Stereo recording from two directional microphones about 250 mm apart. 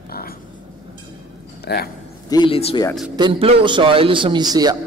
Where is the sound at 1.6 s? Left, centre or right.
Left.